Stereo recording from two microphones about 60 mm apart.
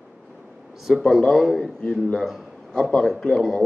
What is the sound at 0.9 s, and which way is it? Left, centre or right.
Speech, centre.